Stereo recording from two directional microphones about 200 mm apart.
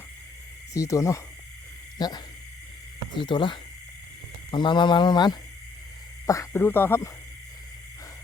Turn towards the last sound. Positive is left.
turn(degrees=10)  # may be behind; listen again after turning